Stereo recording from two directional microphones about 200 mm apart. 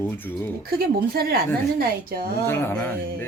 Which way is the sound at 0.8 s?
50° right (ahead or behind).